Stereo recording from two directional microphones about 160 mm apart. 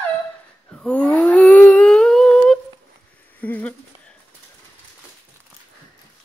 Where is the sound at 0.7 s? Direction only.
5° left (ahead or behind).